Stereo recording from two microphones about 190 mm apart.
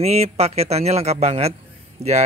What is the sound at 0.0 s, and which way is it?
Speech, 35° right (ahead or behind).